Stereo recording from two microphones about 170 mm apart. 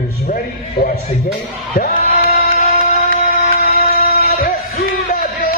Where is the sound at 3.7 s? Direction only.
65° left (ahead or behind).